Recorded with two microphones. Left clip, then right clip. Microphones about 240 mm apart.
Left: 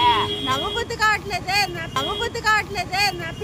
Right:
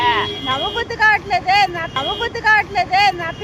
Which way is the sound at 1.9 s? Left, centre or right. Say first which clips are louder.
Right 3 dB; centre.